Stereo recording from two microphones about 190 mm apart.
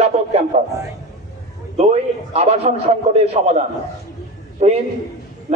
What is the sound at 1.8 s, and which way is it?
A man's voice, 35° right (ahead or behind).